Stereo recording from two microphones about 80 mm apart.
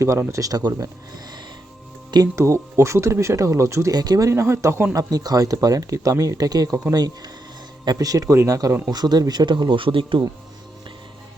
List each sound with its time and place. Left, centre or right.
0.0 s speech: right
2.3 s speech: right
3.9 s speech: right
4.3 s speech: right
4.9 s speech: right
7.9 s speech: right
8.9 s speech: right